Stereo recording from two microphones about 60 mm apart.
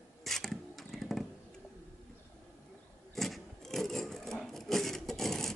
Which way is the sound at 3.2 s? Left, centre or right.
Centre.